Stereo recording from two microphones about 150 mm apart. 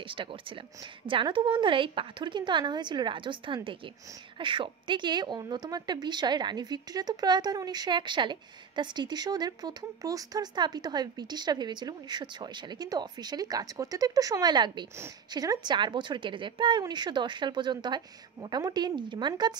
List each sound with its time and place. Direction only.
0.0 s a woman's voice: 35° right (ahead or behind)